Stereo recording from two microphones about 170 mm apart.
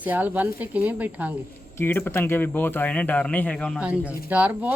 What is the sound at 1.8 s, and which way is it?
Speech, 15° left (ahead or behind).